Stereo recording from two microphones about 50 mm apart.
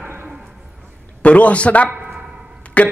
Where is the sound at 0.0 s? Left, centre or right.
Right.